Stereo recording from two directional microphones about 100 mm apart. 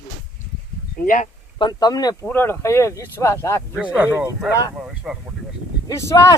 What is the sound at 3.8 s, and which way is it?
Speech, 15° right (ahead or behind).